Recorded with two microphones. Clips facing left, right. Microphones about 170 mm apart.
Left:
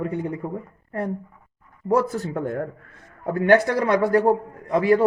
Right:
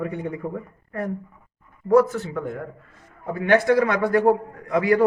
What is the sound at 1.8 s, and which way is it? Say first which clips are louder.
A man's voice: right 4 dB; 30° left (ahead or behind).